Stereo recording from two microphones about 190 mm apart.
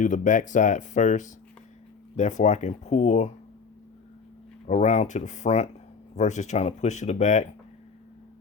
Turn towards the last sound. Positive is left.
turn(degrees=40)  # may be behind; listen again after turning